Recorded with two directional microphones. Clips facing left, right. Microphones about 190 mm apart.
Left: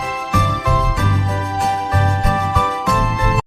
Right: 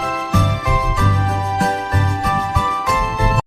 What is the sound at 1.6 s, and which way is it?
Music, centre (ahead or behind).